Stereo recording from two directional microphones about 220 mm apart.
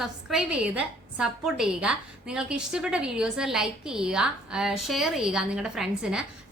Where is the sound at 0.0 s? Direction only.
Centre (ahead or behind).